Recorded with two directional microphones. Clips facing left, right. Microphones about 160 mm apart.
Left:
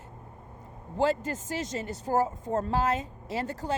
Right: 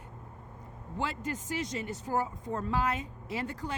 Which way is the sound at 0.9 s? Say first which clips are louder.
Left 8 dB; 40° left (ahead or behind).